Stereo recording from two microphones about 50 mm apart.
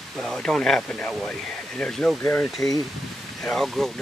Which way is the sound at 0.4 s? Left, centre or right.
Centre.